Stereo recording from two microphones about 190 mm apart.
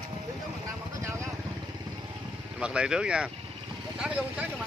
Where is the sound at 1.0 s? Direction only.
15° right (ahead or behind).